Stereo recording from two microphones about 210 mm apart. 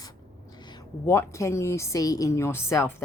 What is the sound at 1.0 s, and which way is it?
A woman's voice, 15° left (ahead or behind).